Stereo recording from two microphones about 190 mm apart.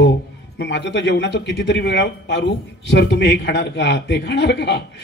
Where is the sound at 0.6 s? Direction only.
65° left (ahead or behind).